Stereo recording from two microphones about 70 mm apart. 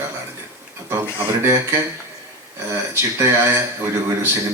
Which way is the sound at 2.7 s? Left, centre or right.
Right.